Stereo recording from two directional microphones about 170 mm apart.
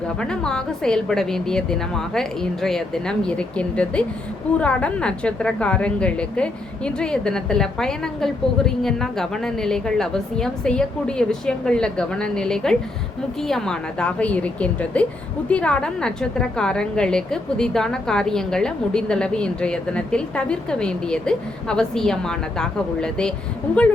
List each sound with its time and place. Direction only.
0.2 s a woman's voice: 5° left (ahead or behind)